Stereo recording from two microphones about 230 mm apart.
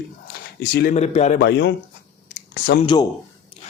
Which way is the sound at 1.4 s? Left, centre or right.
Left.